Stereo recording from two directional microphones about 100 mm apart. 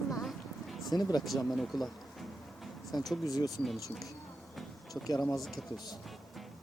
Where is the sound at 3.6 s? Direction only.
Centre (ahead or behind).